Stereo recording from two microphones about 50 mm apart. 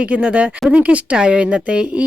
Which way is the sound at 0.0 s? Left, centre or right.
Right.